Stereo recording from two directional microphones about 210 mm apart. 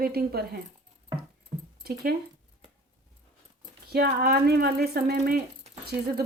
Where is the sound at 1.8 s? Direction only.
45° right (ahead or behind).